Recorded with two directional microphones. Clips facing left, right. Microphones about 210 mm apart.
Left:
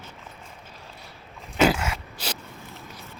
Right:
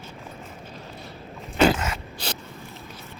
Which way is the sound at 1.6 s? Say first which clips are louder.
Right 1 dB; 10° left (ahead or behind).